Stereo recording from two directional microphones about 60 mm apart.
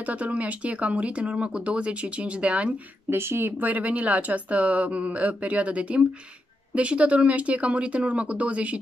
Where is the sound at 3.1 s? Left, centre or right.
Right.